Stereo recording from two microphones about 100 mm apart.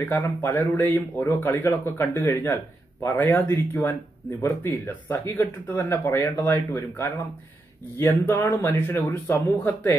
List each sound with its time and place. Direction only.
0.1 s speech: 20° left (ahead or behind)